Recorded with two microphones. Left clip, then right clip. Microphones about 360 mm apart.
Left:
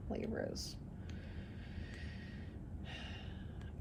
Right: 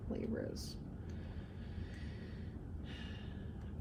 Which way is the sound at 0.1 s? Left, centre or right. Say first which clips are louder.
Left 1 dB; left.